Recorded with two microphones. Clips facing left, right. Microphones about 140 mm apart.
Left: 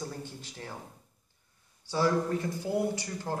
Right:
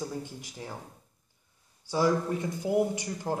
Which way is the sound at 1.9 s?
15° right (ahead or behind).